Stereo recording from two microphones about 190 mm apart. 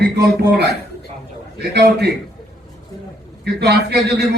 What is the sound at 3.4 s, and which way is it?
Speech, 60° right (ahead or behind).